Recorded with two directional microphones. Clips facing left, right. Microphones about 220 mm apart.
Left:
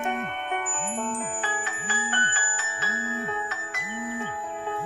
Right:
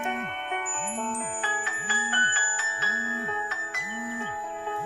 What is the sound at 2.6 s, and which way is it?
Music, 50° left (ahead or behind).